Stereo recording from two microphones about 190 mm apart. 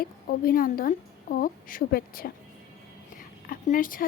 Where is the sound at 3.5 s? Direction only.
45° left (ahead or behind).